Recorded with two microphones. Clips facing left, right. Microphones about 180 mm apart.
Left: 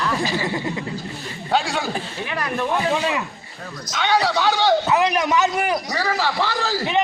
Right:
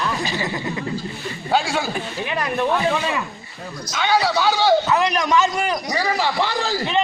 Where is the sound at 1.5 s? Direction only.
Centre (ahead or behind).